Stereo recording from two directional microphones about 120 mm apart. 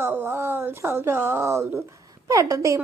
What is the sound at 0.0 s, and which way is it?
A woman's voice, 20° right (ahead or behind).